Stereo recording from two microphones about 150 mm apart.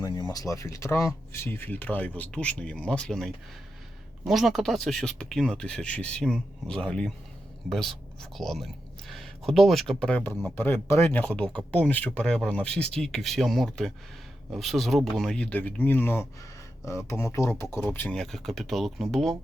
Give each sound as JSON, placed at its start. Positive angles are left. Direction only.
{"t": 0.0, "sound": "a sound", "side_deg": 30}
{"t": 0.3, "sound": "speech", "side_deg": 20}
{"t": 18.2, "sound": "speech", "side_deg": 0}